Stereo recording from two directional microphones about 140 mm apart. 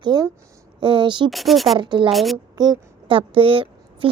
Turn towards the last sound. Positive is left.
turn(degrees=-40)  # may be behind; listen again after turning